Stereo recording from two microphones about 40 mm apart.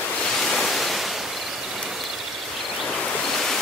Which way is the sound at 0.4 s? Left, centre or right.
Centre.